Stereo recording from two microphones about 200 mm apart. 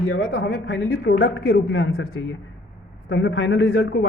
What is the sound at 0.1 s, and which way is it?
A woman's voice, 70° left (ahead or behind).